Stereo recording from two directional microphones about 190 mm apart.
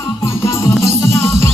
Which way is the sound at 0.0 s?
15° left (ahead or behind).